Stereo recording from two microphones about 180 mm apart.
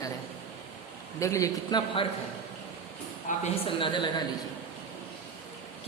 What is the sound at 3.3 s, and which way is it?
Speech, 45° left (ahead or behind).